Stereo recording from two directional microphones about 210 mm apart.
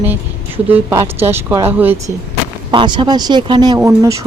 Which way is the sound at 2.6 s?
20° right (ahead or behind).